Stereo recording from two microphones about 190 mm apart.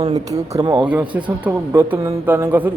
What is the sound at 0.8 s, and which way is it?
Speech, 10° right (ahead or behind).